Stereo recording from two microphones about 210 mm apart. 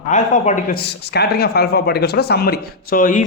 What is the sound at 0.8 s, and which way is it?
Speech, 50° left (ahead or behind).